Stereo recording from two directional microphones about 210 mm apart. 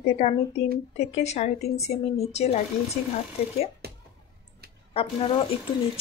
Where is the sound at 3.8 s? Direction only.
50° right (ahead or behind).